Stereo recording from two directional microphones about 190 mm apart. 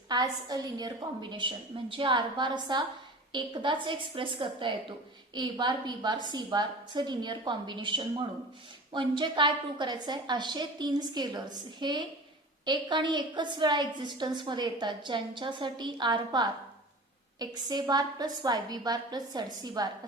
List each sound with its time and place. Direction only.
0.1 s a woman's voice: 20° right (ahead or behind)